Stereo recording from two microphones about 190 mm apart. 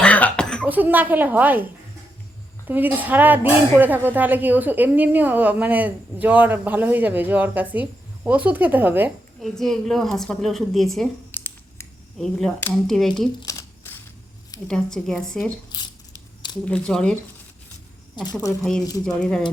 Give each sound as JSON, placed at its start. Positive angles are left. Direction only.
{"t": 0.0, "sound": "cough", "side_deg": 10}
{"t": 0.7, "sound": "speech", "side_deg": -10}
{"t": 2.6, "sound": "speech", "side_deg": -10}
{"t": 9.4, "sound": "a woman's voice", "side_deg": 0}
{"t": 13.4, "sound": "a sound", "side_deg": 15}
{"t": 14.7, "sound": "speech", "side_deg": 5}
{"t": 16.6, "sound": "speech", "side_deg": 5}
{"t": 18.6, "sound": "speech", "side_deg": 5}